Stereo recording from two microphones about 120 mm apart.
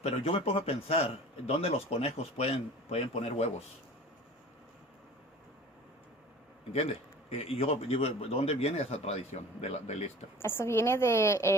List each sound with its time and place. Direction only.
0.0 s a man's voice: 55° left (ahead or behind)
6.7 s a man's voice: 55° left (ahead or behind)
10.4 s a woman's voice: 20° left (ahead or behind)